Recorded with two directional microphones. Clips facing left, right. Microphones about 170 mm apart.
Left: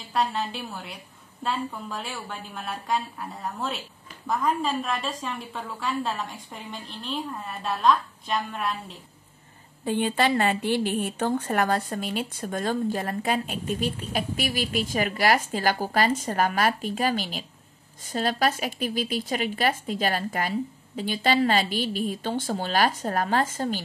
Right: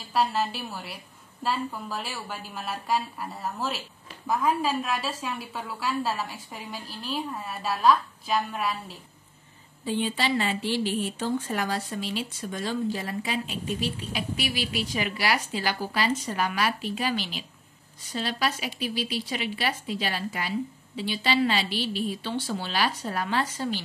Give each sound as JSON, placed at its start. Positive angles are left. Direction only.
{"t": 0.1, "sound": "a woman's voice", "side_deg": -5}
{"t": 9.8, "sound": "a woman's voice", "side_deg": 55}